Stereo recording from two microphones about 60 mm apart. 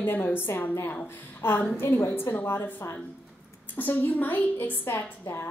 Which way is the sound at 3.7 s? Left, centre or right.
Left.